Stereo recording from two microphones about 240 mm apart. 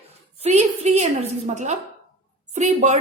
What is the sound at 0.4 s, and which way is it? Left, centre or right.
A woman's voice, right.